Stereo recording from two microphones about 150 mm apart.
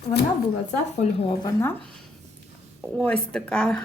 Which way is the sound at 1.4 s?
20° left (ahead or behind).